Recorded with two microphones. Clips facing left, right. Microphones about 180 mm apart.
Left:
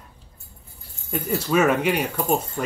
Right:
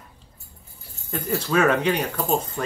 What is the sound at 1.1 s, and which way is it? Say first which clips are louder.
Speech: left 1 dB; 10° left (ahead or behind).